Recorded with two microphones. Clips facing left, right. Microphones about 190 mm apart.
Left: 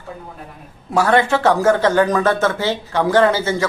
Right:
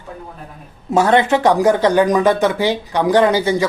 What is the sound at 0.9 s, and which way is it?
Speech, 20° right (ahead or behind).